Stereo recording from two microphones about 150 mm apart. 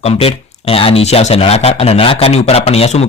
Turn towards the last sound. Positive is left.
turn(degrees=45)  # may be behind; listen again after turning